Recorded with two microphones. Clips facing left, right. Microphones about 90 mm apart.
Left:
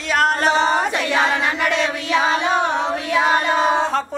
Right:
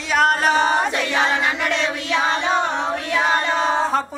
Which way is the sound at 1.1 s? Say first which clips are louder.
Left 2 dB; 5° left (ahead or behind).